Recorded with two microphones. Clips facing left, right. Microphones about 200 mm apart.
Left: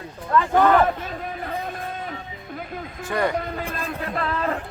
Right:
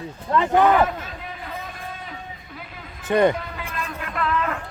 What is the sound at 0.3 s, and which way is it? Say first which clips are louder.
Speech: even; 25° right (ahead or behind).